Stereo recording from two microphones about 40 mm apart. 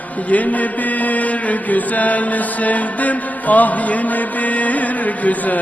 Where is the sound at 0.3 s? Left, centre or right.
Left.